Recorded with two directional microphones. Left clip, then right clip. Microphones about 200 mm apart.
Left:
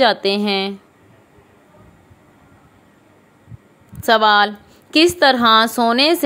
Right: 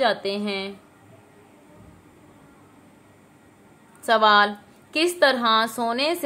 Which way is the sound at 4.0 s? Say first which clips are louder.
Left 4 dB; 40° left (ahead or behind).